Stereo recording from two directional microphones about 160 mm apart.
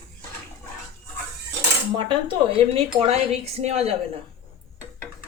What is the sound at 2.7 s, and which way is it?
Speech, 40° right (ahead or behind).